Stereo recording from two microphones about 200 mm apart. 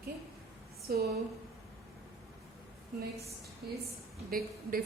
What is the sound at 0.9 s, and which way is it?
Speech, 50° right (ahead or behind).